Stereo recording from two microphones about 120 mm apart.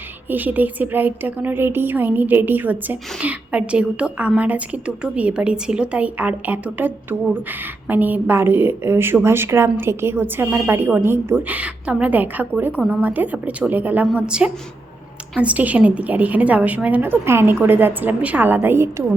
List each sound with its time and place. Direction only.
0.3 s a woman's voice: 15° right (ahead or behind)